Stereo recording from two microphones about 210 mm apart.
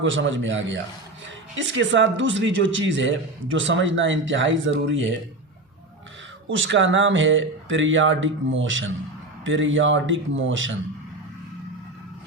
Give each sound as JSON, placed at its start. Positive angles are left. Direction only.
{"t": 0.0, "sound": "speech", "side_deg": -60}
{"t": 6.5, "sound": "speech", "side_deg": -65}